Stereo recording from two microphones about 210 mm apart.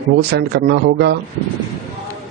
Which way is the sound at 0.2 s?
50° right (ahead or behind).